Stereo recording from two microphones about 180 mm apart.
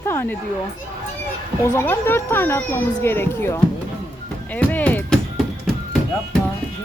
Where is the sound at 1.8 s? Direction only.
10° left (ahead or behind).